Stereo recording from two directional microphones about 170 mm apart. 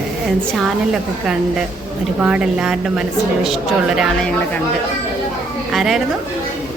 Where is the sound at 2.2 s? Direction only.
5° right (ahead or behind).